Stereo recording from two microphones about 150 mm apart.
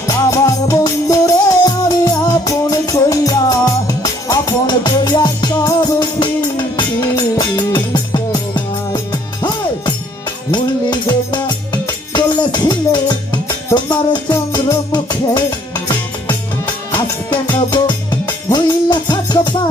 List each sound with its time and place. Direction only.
0.1 s music: 20° left (ahead or behind)
10.5 s music: 30° left (ahead or behind)
17.3 s music: 30° left (ahead or behind)